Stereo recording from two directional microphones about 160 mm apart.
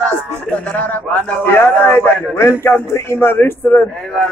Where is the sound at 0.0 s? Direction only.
10° left (ahead or behind).